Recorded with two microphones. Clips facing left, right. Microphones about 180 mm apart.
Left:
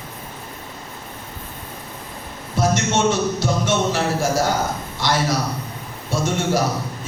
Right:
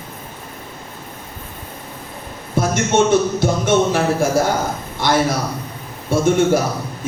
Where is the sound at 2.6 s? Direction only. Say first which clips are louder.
Right 1 dB; 55° right (ahead or behind).